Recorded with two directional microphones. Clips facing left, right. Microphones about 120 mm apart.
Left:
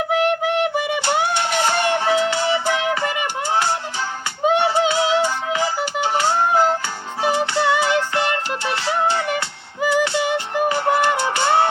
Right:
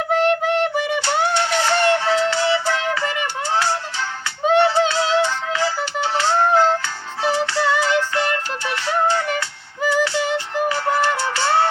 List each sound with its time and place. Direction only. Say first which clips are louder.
0.1 s music: right 3 dB; 10° left (ahead or behind)
8.6 s music: right 1 dB; 30° left (ahead or behind)